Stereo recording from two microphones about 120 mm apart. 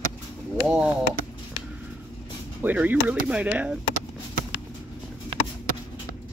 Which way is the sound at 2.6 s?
15° right (ahead or behind).